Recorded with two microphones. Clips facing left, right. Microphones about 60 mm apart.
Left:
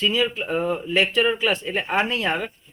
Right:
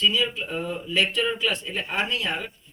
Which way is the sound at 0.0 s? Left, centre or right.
Left.